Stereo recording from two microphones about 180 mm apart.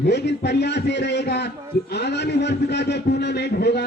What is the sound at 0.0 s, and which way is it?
A man's voice, 70° left (ahead or behind).